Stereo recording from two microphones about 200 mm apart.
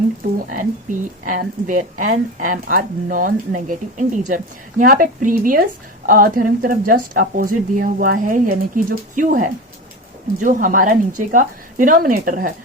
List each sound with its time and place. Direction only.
0.5 s speech: 40° right (ahead or behind)